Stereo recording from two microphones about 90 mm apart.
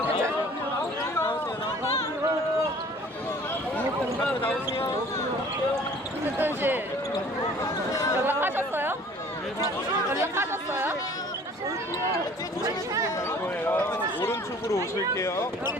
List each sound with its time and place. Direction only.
4.4 s speech: 25° left (ahead or behind)
6.4 s speech: 20° right (ahead or behind)
7.6 s speech: 35° left (ahead or behind)
8.2 s speech: 20° right (ahead or behind)
10.1 s speech: 30° right (ahead or behind)
13.7 s speech: 25° left (ahead or behind)